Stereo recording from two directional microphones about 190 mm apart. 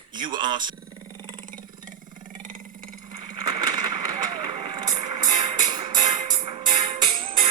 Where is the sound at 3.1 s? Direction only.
25° right (ahead or behind).